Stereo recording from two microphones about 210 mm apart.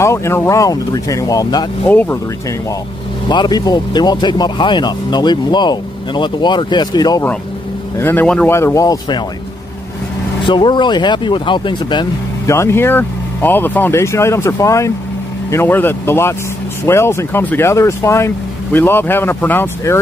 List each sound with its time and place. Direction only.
0.0 s speech: 15° left (ahead or behind)
3.3 s speech: 20° left (ahead or behind)
10.4 s speech: 20° left (ahead or behind)